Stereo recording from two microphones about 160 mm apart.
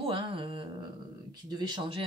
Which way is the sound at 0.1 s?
35° right (ahead or behind).